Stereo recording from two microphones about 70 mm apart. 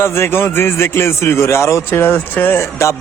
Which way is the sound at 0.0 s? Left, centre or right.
Left.